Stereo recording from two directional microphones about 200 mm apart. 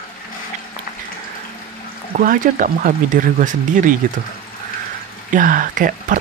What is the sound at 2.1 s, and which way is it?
Speech, 45° right (ahead or behind).